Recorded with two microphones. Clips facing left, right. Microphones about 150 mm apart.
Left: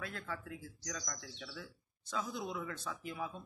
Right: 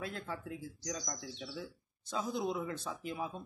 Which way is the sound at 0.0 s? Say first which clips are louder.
Right 3 dB; 25° right (ahead or behind).